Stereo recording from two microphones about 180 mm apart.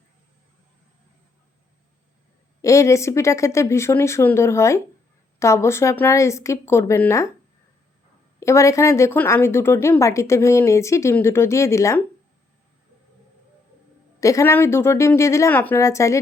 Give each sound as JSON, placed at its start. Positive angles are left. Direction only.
{"t": 2.6, "sound": "speech", "side_deg": 15}
{"t": 8.4, "sound": "speech", "side_deg": 15}
{"t": 14.2, "sound": "speech", "side_deg": 15}